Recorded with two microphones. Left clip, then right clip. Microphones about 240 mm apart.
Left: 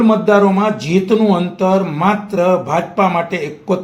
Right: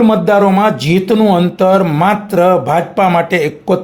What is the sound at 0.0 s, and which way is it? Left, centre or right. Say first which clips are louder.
Speech: right 2 dB; right.